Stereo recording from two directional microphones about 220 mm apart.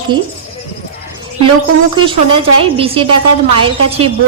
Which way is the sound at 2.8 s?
25° right (ahead or behind).